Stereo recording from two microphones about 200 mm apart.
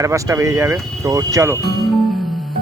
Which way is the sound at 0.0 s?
15° right (ahead or behind).